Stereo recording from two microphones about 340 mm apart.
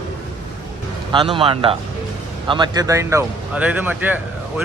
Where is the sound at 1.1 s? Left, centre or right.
Centre.